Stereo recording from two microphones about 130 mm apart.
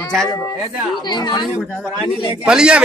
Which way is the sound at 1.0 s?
35° left (ahead or behind).